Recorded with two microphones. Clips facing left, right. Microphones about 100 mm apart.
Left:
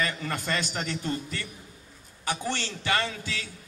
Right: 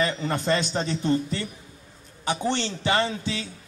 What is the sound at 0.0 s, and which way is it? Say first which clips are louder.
A man's voice: right 5 dB; 25° right (ahead or behind).